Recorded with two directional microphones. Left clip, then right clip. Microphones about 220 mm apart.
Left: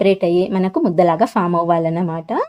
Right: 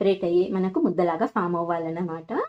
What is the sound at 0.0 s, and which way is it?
Speech, 45° left (ahead or behind).